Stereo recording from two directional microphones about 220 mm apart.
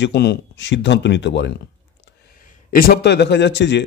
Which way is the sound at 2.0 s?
40° left (ahead or behind).